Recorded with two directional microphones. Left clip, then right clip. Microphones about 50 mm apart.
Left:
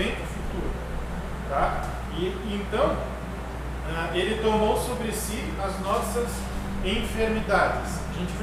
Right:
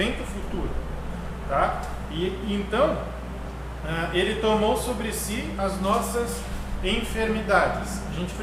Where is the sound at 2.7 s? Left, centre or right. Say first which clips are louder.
Right 2 dB; centre.